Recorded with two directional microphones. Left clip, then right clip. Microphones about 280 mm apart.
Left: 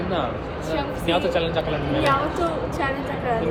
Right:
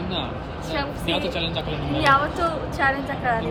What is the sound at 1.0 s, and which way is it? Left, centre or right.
Speech, right.